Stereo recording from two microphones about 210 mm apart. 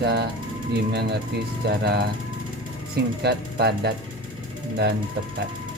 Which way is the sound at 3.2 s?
50° right (ahead or behind).